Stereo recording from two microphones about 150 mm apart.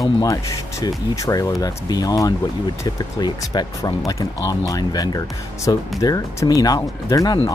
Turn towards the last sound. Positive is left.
turn(degrees=25)  # may be behind; listen again after turning